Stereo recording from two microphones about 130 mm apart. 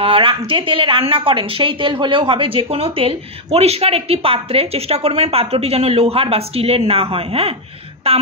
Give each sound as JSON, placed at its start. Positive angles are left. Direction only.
{"t": 0.0, "sound": "a woman's voice", "side_deg": -45}